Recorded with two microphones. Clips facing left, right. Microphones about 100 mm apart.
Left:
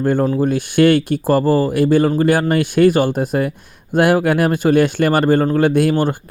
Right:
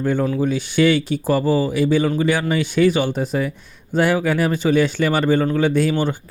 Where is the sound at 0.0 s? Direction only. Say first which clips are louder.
Left 3 dB; 45° left (ahead or behind).